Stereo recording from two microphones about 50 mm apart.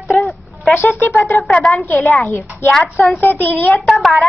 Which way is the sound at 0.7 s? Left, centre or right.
Left.